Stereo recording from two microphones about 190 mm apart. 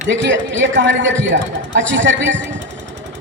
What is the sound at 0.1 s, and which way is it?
A man's voice, 75° right (ahead or behind).